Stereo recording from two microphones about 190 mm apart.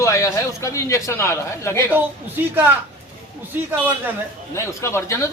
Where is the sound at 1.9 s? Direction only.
10° right (ahead or behind).